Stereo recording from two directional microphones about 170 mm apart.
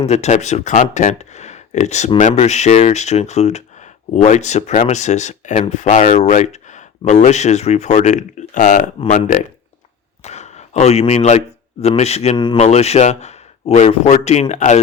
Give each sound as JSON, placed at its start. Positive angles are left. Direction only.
{"t": 0.0, "sound": "a man's voice", "side_deg": 40}
{"t": 12.4, "sound": "speech", "side_deg": 30}
{"t": 12.6, "sound": "speech", "side_deg": 40}